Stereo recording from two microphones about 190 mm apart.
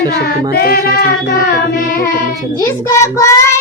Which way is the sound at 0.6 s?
55° left (ahead or behind).